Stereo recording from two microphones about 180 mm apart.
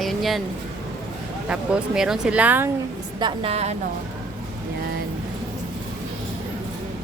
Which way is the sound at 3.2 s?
30° right (ahead or behind).